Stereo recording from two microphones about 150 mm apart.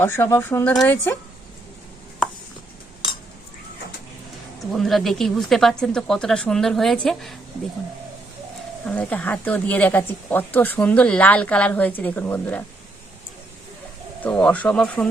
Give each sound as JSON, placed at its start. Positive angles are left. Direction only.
{"t": 0.0, "sound": "speech", "side_deg": 15}
{"t": 4.8, "sound": "speech", "side_deg": 0}
{"t": 8.9, "sound": "speech", "side_deg": 10}
{"t": 14.2, "sound": "speech", "side_deg": 10}